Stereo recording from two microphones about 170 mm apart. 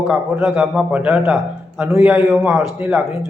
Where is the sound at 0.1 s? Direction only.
5° right (ahead or behind).